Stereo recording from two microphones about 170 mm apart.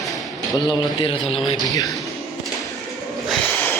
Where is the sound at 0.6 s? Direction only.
30° left (ahead or behind).